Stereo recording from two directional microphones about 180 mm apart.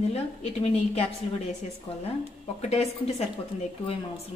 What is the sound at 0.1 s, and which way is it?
A woman's voice, 35° left (ahead or behind).